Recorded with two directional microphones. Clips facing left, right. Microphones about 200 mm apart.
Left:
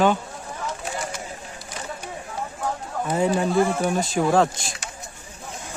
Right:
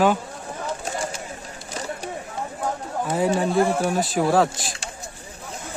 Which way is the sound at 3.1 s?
Centre (ahead or behind).